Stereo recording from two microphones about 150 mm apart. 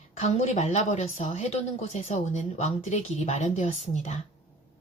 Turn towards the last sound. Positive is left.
turn(degrees=50)  # may be behind; listen again after turning